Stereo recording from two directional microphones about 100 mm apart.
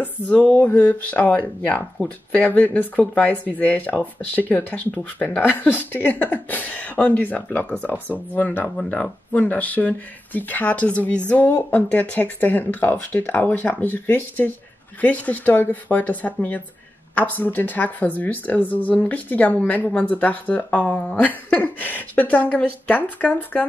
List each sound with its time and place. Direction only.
0.0 s speech: 15° left (ahead or behind)